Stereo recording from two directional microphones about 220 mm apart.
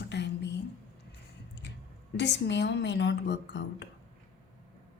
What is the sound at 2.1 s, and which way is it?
Speech, 50° left (ahead or behind).